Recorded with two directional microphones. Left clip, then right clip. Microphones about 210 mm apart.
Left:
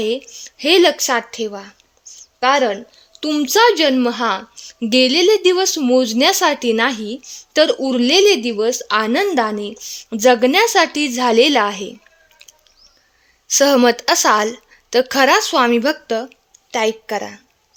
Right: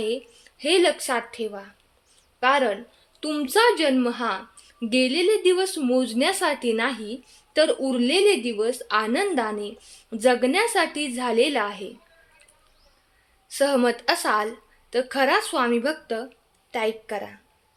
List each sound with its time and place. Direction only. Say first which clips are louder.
0.0 s a woman's voice: left 7 dB; 40° left (ahead or behind)
13.5 s a woman's voice: left 9 dB; 45° left (ahead or behind)